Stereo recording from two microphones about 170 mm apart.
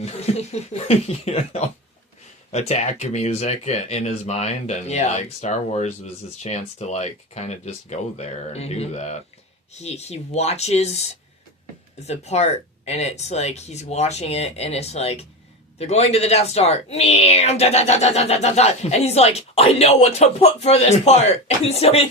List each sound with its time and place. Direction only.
0.0 s speech: 40° left (ahead or behind)